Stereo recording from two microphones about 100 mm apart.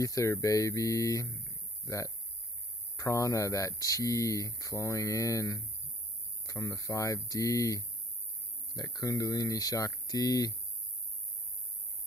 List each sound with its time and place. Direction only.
0.0 s speech: 35° left (ahead or behind)